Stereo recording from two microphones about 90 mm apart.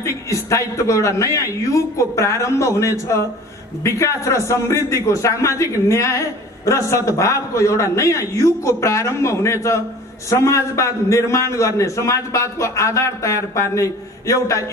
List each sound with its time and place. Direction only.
0.0 s a man's voice: 35° left (ahead or behind)